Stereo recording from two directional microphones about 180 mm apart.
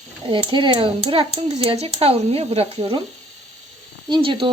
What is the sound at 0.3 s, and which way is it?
A child's voice, 25° right (ahead or behind).